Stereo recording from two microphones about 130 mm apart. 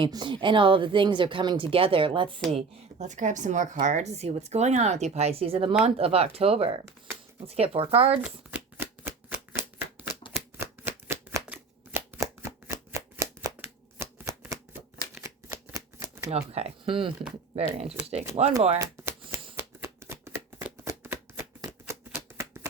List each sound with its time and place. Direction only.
0.0 s speech: 35° right (ahead or behind)
3.1 s speech: 70° right (ahead or behind); by 8.1 s 45° right (ahead or behind)
8.1 s shuffling cards: 10° right (ahead or behind)
12.2 s shuffling cards: 20° right (ahead or behind)
16.3 s speech: 55° right (ahead or behind)
17.7 s speech: 55° right (ahead or behind)
18.8 s shuffling cards: 20° right (ahead or behind)